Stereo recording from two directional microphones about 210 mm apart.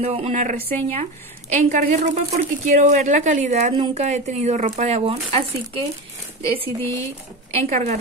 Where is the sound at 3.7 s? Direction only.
20° right (ahead or behind).